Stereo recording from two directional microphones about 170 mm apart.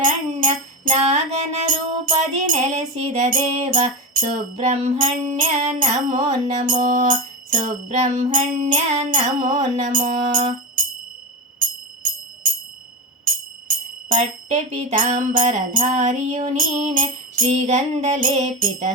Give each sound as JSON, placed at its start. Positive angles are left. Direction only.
{"t": 0.0, "sound": "music", "side_deg": -50}
{"t": 0.9, "sound": "music", "side_deg": -40}
{"t": 13.2, "sound": "speech", "side_deg": -50}
{"t": 17.4, "sound": "music", "side_deg": -40}